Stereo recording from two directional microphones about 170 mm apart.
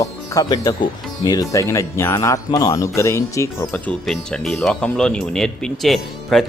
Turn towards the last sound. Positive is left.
turn(degrees=0)  # may be behind; listen again after turning